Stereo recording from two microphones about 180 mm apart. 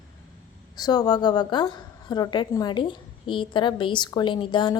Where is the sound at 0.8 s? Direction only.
20° left (ahead or behind).